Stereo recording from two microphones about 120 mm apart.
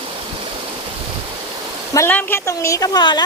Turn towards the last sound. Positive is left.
turn(degrees=35)  # may be behind; listen again after turning